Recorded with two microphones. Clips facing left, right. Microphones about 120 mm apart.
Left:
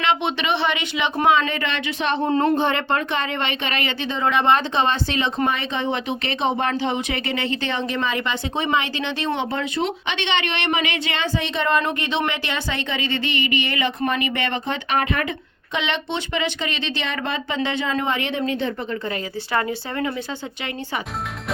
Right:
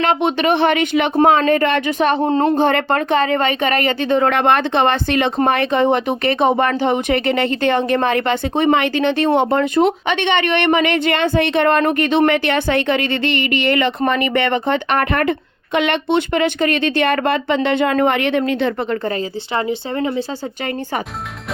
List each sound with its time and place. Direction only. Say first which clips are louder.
0.0 s speech: right 6 dB; 45° right (ahead or behind); by 18.9 s 75° right (ahead or behind)
19.5 s speech: right 4 dB; 25° right (ahead or behind)